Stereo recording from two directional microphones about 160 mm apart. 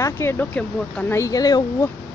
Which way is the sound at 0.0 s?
15° left (ahead or behind).